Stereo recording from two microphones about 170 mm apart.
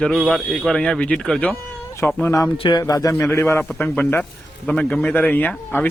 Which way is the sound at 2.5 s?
30° left (ahead or behind).